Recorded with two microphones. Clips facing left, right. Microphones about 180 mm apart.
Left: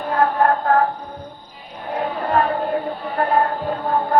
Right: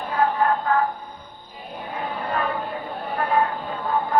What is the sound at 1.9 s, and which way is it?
Music, 70° left (ahead or behind).